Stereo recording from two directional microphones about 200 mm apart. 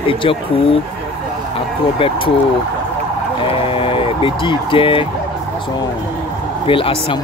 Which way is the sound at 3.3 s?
25° left (ahead or behind).